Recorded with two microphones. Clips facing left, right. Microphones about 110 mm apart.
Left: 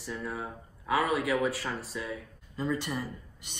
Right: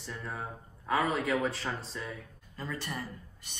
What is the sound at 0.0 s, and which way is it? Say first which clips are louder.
Speech: left 3 dB; 5° left (ahead or behind).